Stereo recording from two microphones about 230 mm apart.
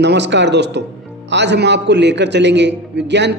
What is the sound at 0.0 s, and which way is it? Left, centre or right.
A man's voice, right.